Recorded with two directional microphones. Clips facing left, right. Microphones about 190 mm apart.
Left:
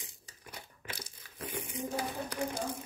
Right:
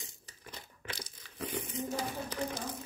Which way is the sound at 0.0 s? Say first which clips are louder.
Right 1 dB; 10° left (ahead or behind).